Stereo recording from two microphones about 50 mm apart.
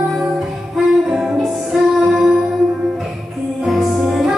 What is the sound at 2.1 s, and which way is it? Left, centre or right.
Music, centre.